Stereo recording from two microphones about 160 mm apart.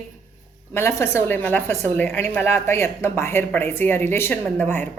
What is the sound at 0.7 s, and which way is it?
A woman's voice, 15° left (ahead or behind).